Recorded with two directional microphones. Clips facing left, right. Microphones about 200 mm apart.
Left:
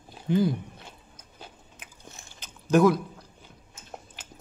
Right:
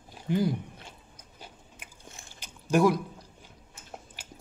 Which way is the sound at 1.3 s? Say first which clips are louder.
Left 2 dB; 10° right (ahead or behind).